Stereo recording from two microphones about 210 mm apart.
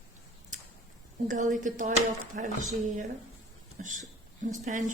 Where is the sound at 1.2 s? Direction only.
35° right (ahead or behind).